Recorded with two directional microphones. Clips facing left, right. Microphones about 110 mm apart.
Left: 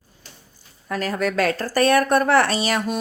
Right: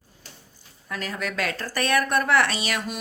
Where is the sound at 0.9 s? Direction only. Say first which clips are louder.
Left 8 dB; 45° left (ahead or behind).